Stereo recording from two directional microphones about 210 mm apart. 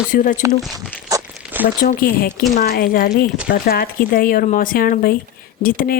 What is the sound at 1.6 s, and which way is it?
Speech, 40° left (ahead or behind).